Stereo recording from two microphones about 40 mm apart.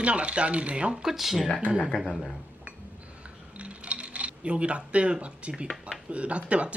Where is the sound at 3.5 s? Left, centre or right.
Right.